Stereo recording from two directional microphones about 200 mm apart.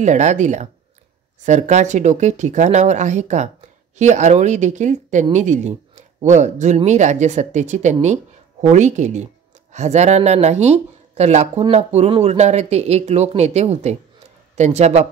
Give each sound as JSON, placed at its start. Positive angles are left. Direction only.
{"t": 0.0, "sound": "speech", "side_deg": -35}